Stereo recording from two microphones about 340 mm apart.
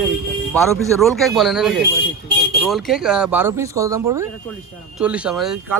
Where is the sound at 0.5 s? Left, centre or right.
Centre.